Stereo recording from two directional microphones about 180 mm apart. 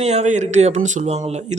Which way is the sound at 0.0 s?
40° right (ahead or behind).